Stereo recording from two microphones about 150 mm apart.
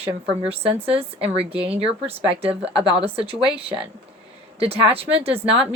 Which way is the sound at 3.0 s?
40° right (ahead or behind).